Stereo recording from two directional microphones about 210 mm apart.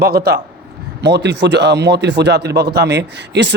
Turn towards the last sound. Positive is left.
turn(degrees=-55)  # may be behind; listen again after turning